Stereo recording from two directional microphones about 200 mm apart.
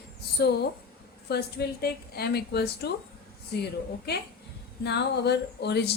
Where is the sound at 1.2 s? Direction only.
55° left (ahead or behind).